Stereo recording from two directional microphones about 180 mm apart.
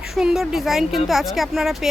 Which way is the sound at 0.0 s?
5° right (ahead or behind).